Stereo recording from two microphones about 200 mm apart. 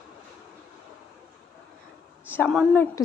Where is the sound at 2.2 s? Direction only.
10° left (ahead or behind).